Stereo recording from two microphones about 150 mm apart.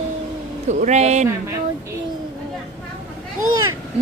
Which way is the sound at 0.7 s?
50° right (ahead or behind).